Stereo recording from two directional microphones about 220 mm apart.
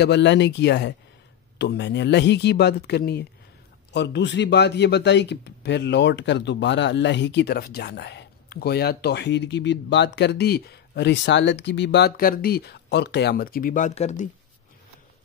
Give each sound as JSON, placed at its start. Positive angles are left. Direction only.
{"t": 0.0, "sound": "a man's voice", "side_deg": 50}